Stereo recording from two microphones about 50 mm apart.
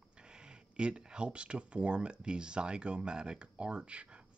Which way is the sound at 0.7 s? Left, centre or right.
Centre.